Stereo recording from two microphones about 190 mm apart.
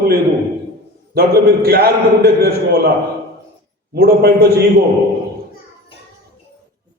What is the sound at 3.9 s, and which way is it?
Speech, 55° right (ahead or behind).